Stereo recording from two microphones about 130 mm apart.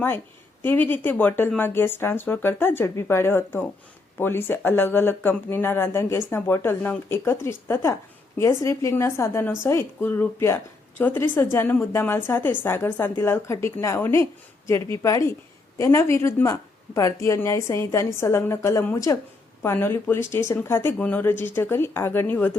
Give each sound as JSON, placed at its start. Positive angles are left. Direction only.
{"t": 0.6, "sound": "a woman's voice", "side_deg": 15}